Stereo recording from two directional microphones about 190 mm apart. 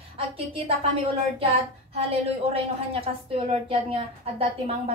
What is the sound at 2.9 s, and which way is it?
A woman's voice, 30° right (ahead or behind).